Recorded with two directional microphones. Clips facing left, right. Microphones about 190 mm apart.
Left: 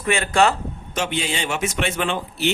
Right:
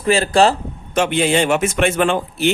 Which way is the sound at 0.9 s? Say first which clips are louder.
Right 9 dB; 55° right (ahead or behind).